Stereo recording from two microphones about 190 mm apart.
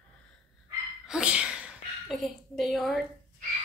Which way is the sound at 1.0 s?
5° right (ahead or behind).